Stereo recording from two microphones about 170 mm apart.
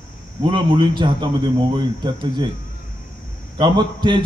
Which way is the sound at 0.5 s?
30° right (ahead or behind).